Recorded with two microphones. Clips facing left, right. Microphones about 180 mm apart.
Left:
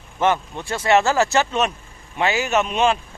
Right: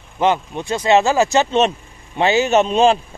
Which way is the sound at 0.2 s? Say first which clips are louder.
Right 3 dB; 15° right (ahead or behind).